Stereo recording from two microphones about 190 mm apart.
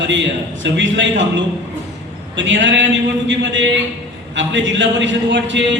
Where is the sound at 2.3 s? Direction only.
75° right (ahead or behind).